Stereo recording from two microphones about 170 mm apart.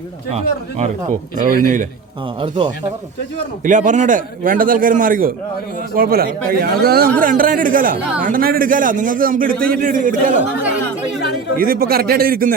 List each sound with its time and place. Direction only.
0.3 s speech: 40° right (ahead or behind)
1.4 s a man's voice: 50° right (ahead or behind)
3.6 s a man's voice: 45° right (ahead or behind)
11.5 s speech: 60° right (ahead or behind)